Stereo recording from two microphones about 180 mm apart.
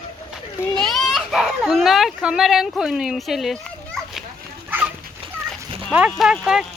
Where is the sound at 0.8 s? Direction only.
Centre (ahead or behind).